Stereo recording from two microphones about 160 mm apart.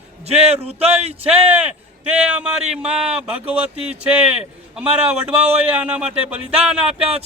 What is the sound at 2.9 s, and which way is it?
Speech, 40° right (ahead or behind).